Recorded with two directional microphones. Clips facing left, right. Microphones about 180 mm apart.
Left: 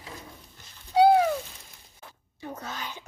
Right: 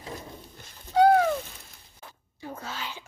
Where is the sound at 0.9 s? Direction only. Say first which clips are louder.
Even; 10° left (ahead or behind).